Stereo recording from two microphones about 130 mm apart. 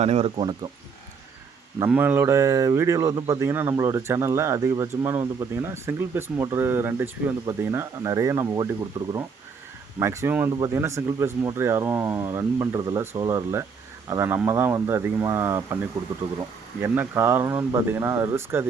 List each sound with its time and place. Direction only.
0.0 s speech: 55° right (ahead or behind)
0.3 s speech: 35° right (ahead or behind)
1.9 s speech: 15° right (ahead or behind)